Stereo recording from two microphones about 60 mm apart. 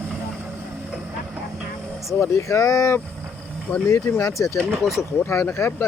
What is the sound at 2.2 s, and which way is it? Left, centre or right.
Speech, left.